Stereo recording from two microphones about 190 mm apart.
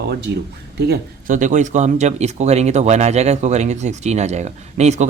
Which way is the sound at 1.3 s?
40° right (ahead or behind).